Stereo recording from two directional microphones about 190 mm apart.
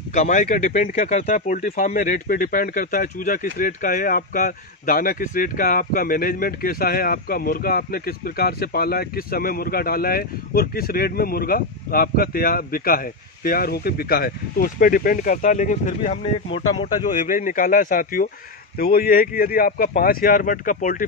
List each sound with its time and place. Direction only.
0.1 s speech: 35° left (ahead or behind)
17.1 s speech: 45° left (ahead or behind)